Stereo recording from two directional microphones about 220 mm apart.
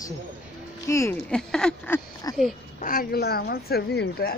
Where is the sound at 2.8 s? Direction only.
40° left (ahead or behind).